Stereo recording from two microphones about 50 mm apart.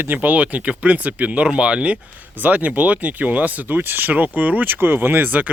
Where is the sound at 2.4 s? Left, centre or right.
Right.